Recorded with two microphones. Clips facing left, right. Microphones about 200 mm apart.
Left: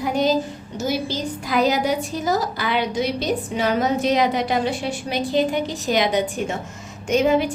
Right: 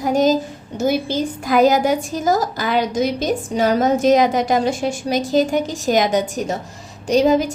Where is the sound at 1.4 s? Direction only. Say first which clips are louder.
Right 5 dB; 50° right (ahead or behind).